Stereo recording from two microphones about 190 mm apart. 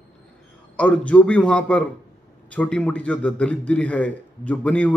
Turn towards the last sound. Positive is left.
turn(degrees=5)  # may be behind; listen again after turning